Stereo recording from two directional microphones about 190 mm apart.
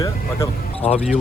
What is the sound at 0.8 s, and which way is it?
Speech, 35° left (ahead or behind).